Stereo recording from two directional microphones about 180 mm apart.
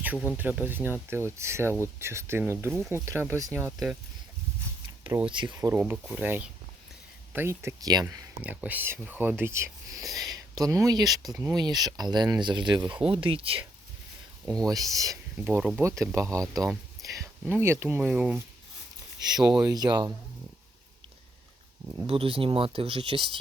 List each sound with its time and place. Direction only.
0.3 s speech: 10° right (ahead or behind)
2.6 s speech: 5° left (ahead or behind)
2.9 s speech: 15° right (ahead or behind)
3.7 s speech: centre (ahead or behind)
5.0 s speech: 10° right (ahead or behind)
5.3 s speech: 25° right (ahead or behind)
14.4 s speech: 5° left (ahead or behind)
14.7 s speech: 20° right (ahead or behind)
19.6 s speech: 20° right (ahead or behind)
22.0 s speech: 30° right (ahead or behind)